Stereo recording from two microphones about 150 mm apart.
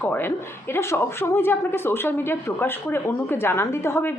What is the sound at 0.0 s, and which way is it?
Speech, 15° left (ahead or behind).